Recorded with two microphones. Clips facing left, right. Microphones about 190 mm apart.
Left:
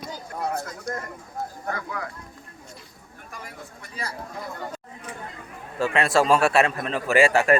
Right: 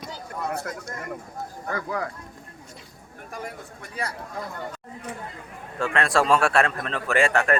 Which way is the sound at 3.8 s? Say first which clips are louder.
Right 3 dB; 60° right (ahead or behind).